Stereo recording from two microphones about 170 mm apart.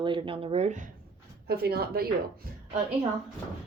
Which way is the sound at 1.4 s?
65° right (ahead or behind).